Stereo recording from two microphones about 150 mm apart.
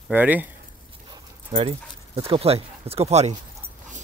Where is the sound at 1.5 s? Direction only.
35° right (ahead or behind).